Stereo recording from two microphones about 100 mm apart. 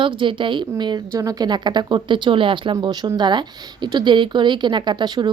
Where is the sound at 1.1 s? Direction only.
35° right (ahead or behind).